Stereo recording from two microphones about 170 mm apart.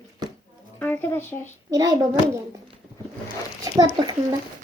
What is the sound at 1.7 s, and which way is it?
Speech, 20° right (ahead or behind).